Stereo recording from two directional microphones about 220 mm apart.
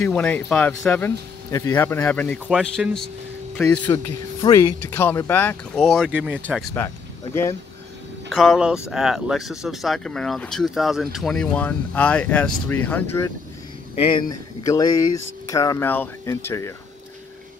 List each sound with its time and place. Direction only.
0.0 s speech: 5° left (ahead or behind)
8.3 s speech: centre (ahead or behind)
14.7 s speech: 15° left (ahead or behind)